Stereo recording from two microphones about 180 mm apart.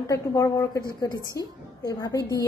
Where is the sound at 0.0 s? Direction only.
20° left (ahead or behind).